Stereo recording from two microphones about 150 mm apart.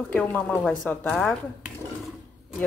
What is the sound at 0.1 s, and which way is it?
A woman's voice, 10° left (ahead or behind).